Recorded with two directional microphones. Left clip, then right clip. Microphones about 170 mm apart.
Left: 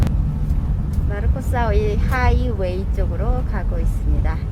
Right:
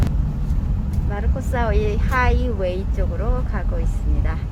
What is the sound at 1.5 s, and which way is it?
Speech, centre (ahead or behind).